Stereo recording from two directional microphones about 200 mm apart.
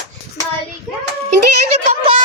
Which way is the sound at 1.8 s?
35° right (ahead or behind).